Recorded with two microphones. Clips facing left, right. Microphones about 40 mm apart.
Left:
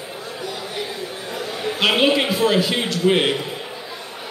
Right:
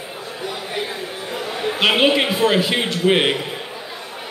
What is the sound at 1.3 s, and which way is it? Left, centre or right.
A man's voice, right.